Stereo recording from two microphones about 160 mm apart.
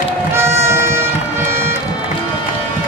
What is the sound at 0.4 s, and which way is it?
Music, 15° right (ahead or behind).